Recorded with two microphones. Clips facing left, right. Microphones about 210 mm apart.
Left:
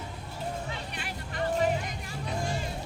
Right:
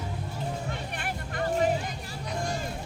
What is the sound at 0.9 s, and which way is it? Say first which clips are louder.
Music: right 3 dB; 50° right (ahead or behind).